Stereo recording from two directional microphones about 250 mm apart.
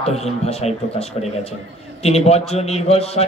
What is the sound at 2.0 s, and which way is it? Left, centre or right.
Speech, left.